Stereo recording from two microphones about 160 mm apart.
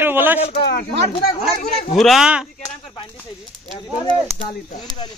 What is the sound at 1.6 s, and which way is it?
Speech, 40° left (ahead or behind).